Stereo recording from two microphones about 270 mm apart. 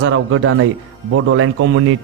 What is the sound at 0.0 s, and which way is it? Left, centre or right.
Speech, right.